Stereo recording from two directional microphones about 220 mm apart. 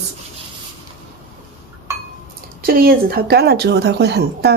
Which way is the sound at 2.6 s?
40° right (ahead or behind).